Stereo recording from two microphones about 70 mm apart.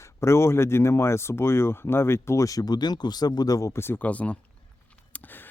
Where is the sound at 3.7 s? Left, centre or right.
Left.